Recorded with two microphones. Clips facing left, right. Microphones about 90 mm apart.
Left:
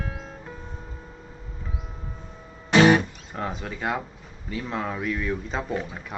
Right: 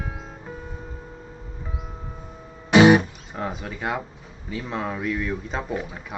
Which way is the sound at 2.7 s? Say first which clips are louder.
Right 3 dB; 15° right (ahead or behind).